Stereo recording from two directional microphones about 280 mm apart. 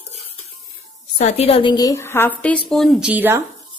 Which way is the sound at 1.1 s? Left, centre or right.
Left.